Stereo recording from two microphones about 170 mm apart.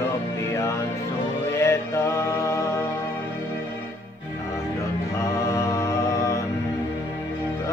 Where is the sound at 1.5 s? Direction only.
15° left (ahead or behind).